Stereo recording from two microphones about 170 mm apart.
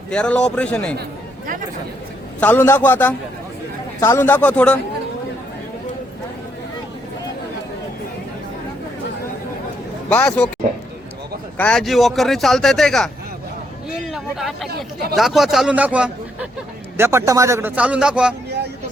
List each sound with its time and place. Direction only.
0.1 s a man's voice: 5° left (ahead or behind)
2.4 s a man's voice: 10° left (ahead or behind)
10.1 s a man's voice: 5° left (ahead or behind)
11.5 s a man's voice: 5° left (ahead or behind)